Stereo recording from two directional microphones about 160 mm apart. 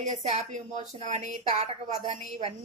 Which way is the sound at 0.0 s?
45° right (ahead or behind).